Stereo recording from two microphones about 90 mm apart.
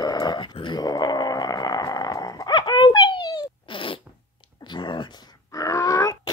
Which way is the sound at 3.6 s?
75° left (ahead or behind).